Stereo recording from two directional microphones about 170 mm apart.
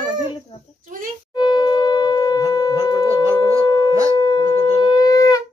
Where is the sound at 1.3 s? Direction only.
25° left (ahead or behind).